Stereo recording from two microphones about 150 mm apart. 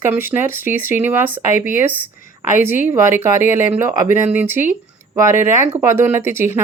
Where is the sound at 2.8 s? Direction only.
15° right (ahead or behind).